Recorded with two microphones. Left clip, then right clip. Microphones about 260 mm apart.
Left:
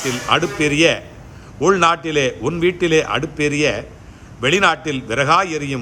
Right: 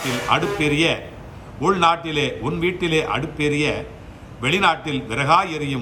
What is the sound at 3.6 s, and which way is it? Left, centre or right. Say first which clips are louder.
Speech: left 4 dB; right.